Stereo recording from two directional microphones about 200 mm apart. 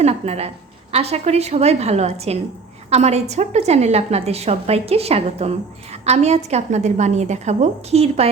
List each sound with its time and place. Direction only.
0.0 s a woman's voice: 30° right (ahead or behind)